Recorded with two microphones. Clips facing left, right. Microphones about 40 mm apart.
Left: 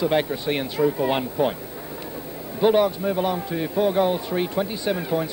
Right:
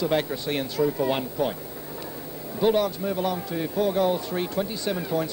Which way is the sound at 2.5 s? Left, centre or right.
Left.